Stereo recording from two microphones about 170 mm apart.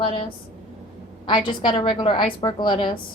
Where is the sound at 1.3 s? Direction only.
30° left (ahead or behind).